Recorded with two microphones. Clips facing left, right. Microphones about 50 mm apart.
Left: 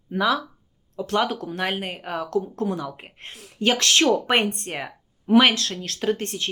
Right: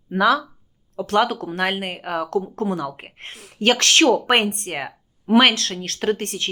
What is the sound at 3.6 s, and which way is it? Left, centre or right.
Speech, right.